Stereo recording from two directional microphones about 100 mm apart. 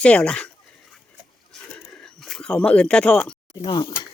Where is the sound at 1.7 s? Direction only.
5° left (ahead or behind).